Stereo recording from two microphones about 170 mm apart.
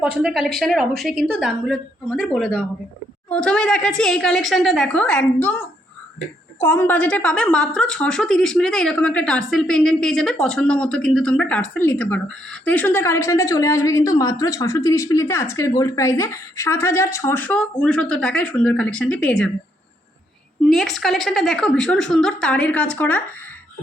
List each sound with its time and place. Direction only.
0.0 s a woman's voice: 5° right (ahead or behind)
20.7 s a woman's voice: centre (ahead or behind)